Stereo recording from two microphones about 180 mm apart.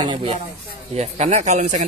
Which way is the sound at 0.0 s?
30° right (ahead or behind).